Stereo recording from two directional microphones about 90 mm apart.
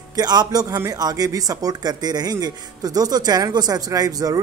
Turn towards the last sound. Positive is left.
turn(degrees=-45)  # may be behind; listen again after turning